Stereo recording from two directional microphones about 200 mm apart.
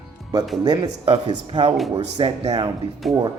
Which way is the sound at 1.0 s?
25° right (ahead or behind).